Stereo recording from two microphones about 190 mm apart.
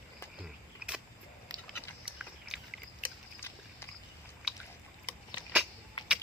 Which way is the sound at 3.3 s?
10° left (ahead or behind).